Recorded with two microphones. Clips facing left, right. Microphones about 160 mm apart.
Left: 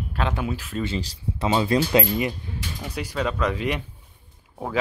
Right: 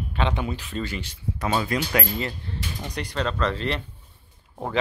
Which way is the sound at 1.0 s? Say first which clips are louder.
Left 3 dB; 35° left (ahead or behind).